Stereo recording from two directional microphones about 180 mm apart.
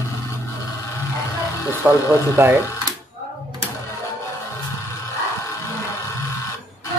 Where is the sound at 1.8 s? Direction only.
Centre (ahead or behind).